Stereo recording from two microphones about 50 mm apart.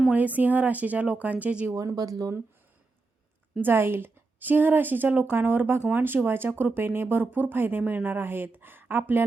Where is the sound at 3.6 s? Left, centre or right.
Right.